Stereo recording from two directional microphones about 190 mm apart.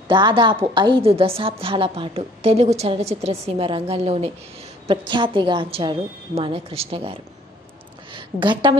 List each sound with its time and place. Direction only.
0.1 s a woman's voice: 25° right (ahead or behind)